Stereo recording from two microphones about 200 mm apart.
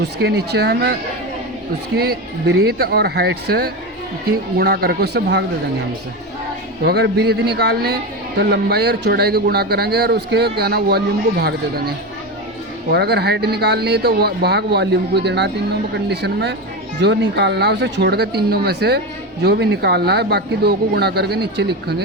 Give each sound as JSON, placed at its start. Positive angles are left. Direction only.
{"t": 0.2, "sound": "a man's voice", "side_deg": -55}
{"t": 2.0, "sound": "speech", "side_deg": -50}
{"t": 6.8, "sound": "a man's voice", "side_deg": -55}